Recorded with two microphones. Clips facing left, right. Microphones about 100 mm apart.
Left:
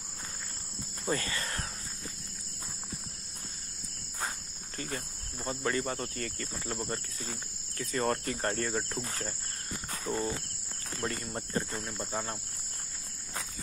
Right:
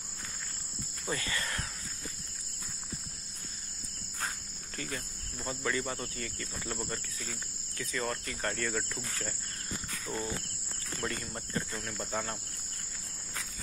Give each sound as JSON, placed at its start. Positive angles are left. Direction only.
{"t": 1.1, "sound": "cricket", "side_deg": 35}
{"t": 4.7, "sound": "speech", "side_deg": 35}
{"t": 6.7, "sound": "speech", "side_deg": 30}
{"t": 9.8, "sound": "cricket", "side_deg": 35}
{"t": 11.2, "sound": "speech", "side_deg": 30}
{"t": 11.9, "sound": "cricket", "side_deg": 20}